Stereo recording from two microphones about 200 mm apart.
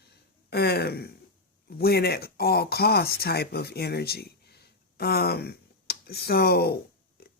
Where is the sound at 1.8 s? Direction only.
50° left (ahead or behind).